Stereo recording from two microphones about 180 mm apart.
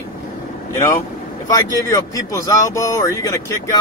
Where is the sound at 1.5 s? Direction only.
15° left (ahead or behind).